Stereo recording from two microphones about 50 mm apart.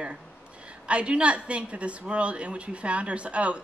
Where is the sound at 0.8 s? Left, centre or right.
Right.